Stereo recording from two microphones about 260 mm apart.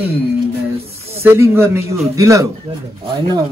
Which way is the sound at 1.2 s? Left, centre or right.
Centre.